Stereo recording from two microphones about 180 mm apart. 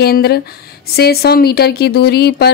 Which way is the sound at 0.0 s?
60° left (ahead or behind).